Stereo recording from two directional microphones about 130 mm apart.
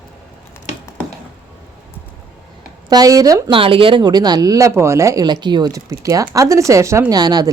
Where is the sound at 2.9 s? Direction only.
30° right (ahead or behind).